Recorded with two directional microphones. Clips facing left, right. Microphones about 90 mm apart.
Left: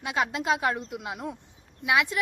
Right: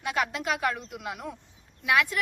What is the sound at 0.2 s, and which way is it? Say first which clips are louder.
A woman's voice: left 3 dB; 25° left (ahead or behind).